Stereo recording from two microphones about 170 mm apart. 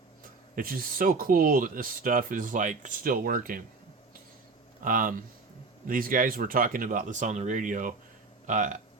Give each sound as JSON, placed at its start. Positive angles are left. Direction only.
{"t": 0.5, "sound": "speech", "side_deg": -60}
{"t": 4.8, "sound": "speech", "side_deg": -50}